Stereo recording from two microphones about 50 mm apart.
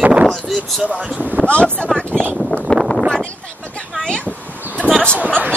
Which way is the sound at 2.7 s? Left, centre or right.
Left.